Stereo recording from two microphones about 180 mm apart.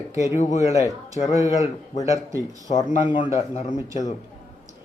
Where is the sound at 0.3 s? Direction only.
40° left (ahead or behind).